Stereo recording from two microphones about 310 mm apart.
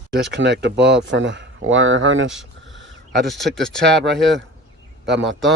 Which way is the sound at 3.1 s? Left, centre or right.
Centre.